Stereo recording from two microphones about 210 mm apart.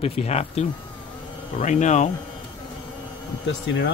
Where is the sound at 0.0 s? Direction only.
30° left (ahead or behind).